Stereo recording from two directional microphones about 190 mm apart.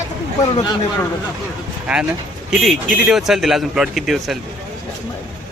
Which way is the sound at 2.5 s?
Centre (ahead or behind).